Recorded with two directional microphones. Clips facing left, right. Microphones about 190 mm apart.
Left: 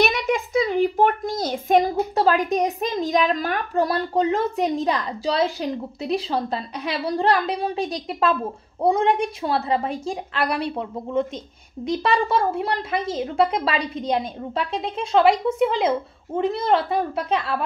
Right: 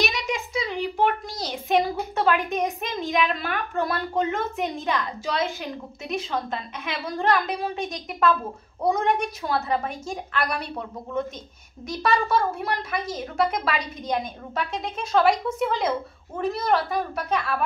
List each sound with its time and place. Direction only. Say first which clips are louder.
0.0 s a child's voice: left 6 dB; 55° left (ahead or behind); by 17.6 s 25° left (ahead or behind)